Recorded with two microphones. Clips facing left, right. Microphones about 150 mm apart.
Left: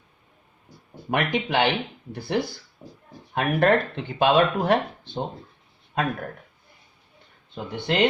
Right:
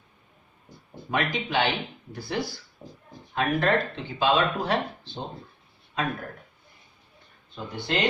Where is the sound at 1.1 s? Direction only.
60° left (ahead or behind).